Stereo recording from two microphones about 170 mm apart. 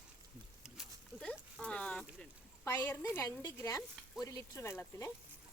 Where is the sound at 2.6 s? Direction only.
10° left (ahead or behind).